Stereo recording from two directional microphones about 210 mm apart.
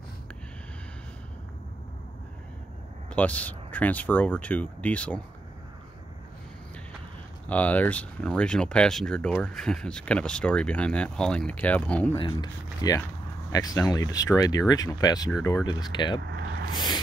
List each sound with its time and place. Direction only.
3.1 s speech: 5° left (ahead or behind)
7.4 s speech: 5° left (ahead or behind)
12.2 s speech: 20° left (ahead or behind)
16.2 s vehicle: 50° right (ahead or behind)
16.7 s speech: 20° left (ahead or behind)